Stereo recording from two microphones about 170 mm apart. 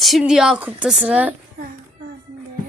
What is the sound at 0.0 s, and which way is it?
A woman's voice, centre (ahead or behind).